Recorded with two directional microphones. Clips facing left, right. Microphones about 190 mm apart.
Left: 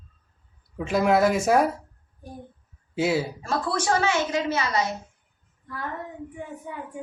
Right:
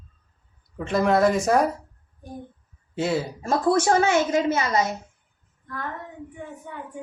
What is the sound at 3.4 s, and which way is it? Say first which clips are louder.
A woman's voice: right 10 dB; 45° right (ahead or behind).